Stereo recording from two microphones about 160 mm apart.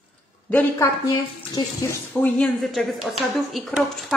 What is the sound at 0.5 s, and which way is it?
Speech, 10° left (ahead or behind).